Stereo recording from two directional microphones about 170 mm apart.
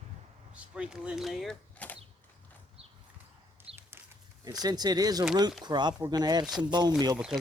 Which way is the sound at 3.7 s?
5° right (ahead or behind).